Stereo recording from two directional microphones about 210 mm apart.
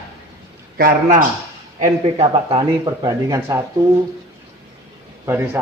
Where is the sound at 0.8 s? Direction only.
45° right (ahead or behind).